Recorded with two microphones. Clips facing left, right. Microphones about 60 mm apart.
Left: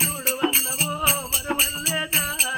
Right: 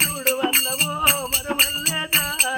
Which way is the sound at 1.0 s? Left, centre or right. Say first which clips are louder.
Right 4 dB; right.